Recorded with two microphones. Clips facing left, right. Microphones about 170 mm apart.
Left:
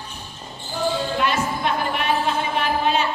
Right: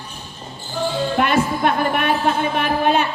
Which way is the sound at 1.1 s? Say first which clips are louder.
Right 4 dB; 55° right (ahead or behind).